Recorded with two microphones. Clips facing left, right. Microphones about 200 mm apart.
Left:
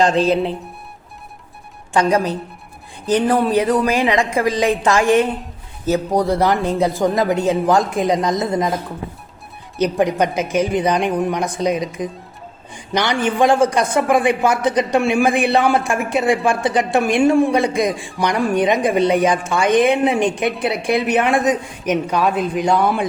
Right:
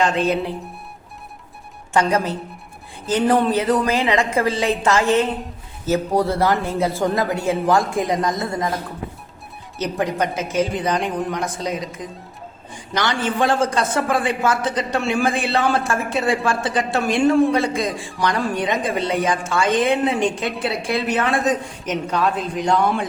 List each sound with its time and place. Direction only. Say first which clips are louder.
0.0 s speech: left 4 dB; 35° left (ahead or behind)
1.9 s a woman's voice: left 3 dB; 15° left (ahead or behind)
9.7 s a man's voice: left 5 dB; 15° left (ahead or behind)